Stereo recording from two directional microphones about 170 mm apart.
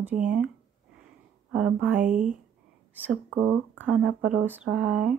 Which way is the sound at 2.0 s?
50° right (ahead or behind).